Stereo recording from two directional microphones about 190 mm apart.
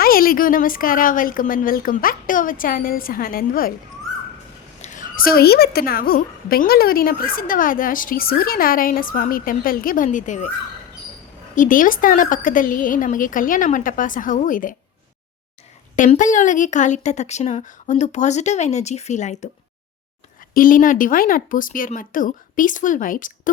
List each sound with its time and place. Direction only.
0.0 s a woman's voice: 50° left (ahead or behind)
4.8 s a woman's voice: 40° left (ahead or behind)
11.5 s a woman's voice: 45° left (ahead or behind)
16.0 s a woman's voice: 45° left (ahead or behind)
20.5 s a woman's voice: 45° left (ahead or behind)